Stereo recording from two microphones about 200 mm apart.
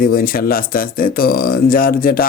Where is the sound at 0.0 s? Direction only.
45° left (ahead or behind).